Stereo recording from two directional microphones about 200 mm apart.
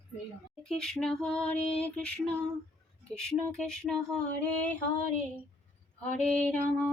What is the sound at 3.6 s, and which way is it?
Female singing, 5° left (ahead or behind).